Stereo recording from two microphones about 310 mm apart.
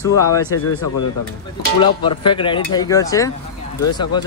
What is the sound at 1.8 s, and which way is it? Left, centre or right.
Speech, centre.